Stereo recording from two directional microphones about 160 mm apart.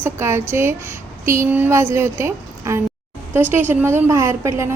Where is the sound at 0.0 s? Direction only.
15° right (ahead or behind).